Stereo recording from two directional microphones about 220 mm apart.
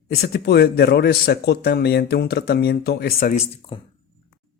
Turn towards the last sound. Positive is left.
turn(degrees=25)  # may be behind; listen again after turning